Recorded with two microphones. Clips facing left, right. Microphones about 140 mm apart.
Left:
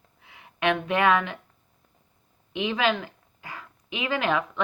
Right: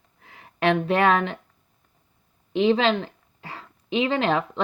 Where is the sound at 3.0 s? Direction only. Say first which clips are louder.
Right 3 dB; 30° right (ahead or behind).